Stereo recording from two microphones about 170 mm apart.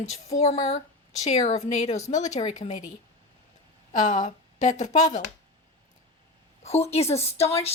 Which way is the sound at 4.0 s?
45° left (ahead or behind).